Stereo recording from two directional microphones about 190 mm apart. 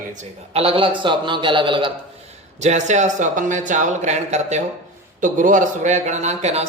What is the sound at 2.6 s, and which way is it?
Speech, 35° right (ahead or behind).